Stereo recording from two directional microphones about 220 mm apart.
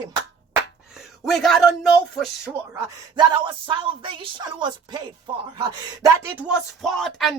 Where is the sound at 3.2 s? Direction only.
20° right (ahead or behind).